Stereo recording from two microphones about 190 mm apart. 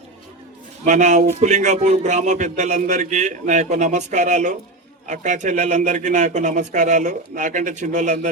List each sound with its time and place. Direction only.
0.9 s speech: 40° right (ahead or behind)